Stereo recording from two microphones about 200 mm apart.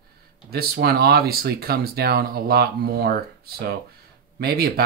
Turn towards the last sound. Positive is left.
turn(degrees=-50)  # may be behind; listen again after turning